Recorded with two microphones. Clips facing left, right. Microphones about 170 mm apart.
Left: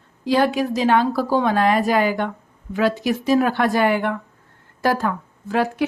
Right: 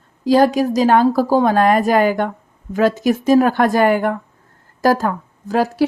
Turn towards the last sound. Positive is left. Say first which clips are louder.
# right 4 dB
turn(degrees=-40)  # may be behind; listen again after turning